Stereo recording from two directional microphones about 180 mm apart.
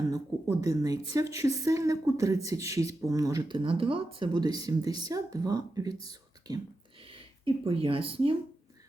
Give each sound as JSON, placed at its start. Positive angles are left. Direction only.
{"t": 0.1, "sound": "a woman's voice", "side_deg": -20}
{"t": 7.0, "sound": "speech", "side_deg": -30}